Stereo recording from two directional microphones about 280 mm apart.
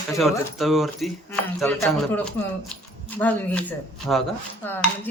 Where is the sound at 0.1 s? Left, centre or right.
Centre.